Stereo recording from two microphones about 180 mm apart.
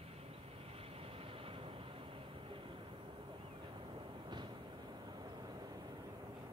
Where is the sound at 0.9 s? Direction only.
30° right (ahead or behind).